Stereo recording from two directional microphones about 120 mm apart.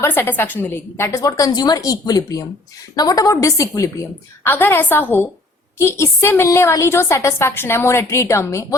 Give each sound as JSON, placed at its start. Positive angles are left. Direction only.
{"t": 0.0, "sound": "a woman's voice", "side_deg": 20}
{"t": 4.4, "sound": "a woman's voice", "side_deg": 15}